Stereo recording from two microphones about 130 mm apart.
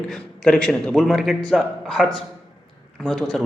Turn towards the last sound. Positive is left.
turn(degrees=0)  # may be behind; listen again after turning